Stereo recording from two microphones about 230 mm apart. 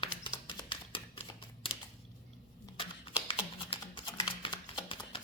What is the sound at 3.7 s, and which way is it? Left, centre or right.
Typing, left.